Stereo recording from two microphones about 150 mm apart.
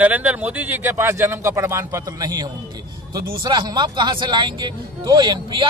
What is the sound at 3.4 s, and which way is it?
Speech, 30° right (ahead or behind).